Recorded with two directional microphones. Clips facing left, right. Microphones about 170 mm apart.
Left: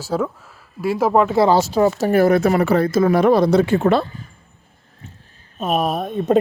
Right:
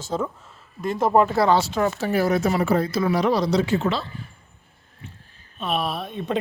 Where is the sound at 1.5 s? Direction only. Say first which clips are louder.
Left 4 dB; 40° left (ahead or behind).